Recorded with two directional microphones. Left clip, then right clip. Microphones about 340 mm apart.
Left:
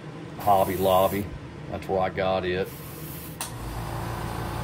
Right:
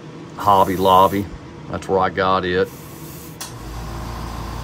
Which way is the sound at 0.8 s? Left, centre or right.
Right.